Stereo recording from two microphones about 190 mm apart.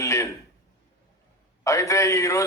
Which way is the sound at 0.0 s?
15° left (ahead or behind).